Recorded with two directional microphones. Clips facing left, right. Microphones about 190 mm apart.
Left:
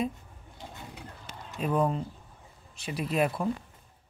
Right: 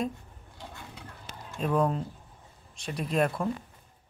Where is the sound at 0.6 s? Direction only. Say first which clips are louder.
Left 1 dB; 20° left (ahead or behind).